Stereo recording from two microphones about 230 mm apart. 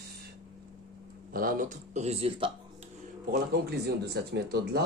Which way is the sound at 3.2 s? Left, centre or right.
Right.